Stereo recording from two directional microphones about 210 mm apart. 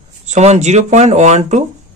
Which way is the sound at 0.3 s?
30° right (ahead or behind).